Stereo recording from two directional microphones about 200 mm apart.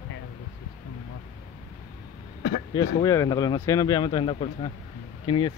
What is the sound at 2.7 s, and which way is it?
Speech, 20° left (ahead or behind).